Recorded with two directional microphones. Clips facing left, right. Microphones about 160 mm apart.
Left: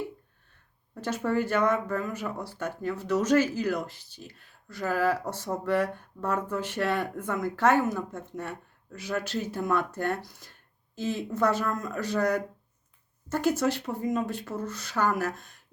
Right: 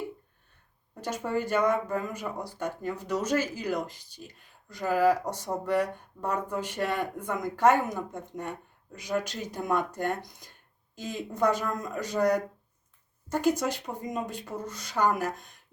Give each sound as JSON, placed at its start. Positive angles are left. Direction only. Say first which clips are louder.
{"t": 1.0, "sound": "speech", "louder": "left 3 dB", "side_deg": -15}